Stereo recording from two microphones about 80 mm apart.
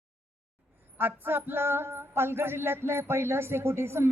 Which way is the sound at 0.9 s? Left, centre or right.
Right.